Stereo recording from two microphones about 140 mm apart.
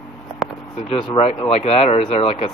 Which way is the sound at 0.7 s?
40° left (ahead or behind).